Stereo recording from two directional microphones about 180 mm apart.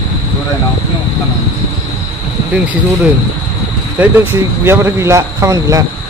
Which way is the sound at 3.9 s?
10° right (ahead or behind).